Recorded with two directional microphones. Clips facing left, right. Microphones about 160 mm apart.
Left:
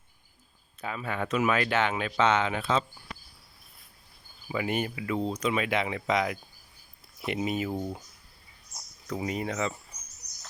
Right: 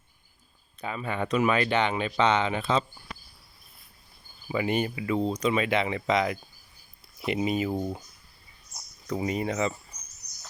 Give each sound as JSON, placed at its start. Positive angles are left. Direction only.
{"t": 0.8, "sound": "speech", "side_deg": 0}
{"t": 4.4, "sound": "speech", "side_deg": 0}
{"t": 7.7, "sound": "speech", "side_deg": -15}
{"t": 9.0, "sound": "speech", "side_deg": 0}